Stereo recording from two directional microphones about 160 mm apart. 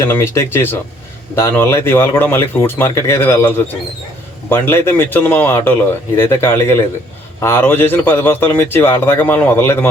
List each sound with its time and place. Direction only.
0.0 s a man's voice: 15° left (ahead or behind)